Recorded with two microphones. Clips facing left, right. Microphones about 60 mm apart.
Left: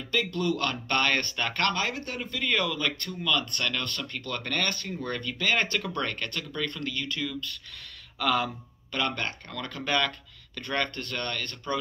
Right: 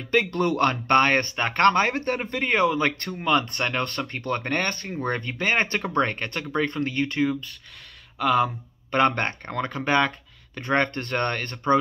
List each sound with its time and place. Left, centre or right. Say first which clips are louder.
0.1 s speech: right 6 dB; right
8.2 s speech: right 5 dB; centre
8.9 s speech: right 9 dB; right
9.7 s speech: right 5 dB; right